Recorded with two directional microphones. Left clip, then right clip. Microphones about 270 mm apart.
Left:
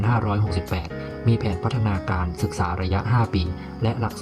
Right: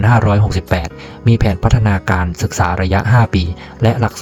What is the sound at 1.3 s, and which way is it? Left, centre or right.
Speech, right.